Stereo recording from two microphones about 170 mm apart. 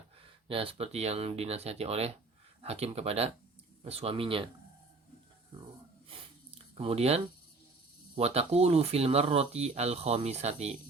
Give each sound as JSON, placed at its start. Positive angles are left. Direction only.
{"t": 0.4, "sound": "speech", "side_deg": -35}
{"t": 6.1, "sound": "a sound", "side_deg": -35}
{"t": 8.1, "sound": "speech", "side_deg": -35}